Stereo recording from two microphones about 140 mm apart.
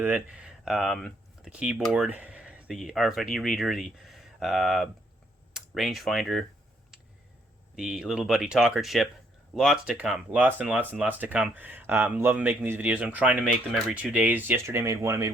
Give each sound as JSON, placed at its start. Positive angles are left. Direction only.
{"t": 0.0, "sound": "speech", "side_deg": -10}
{"t": 1.5, "sound": "speech", "side_deg": -5}
{"t": 7.8, "sound": "speech", "side_deg": -5}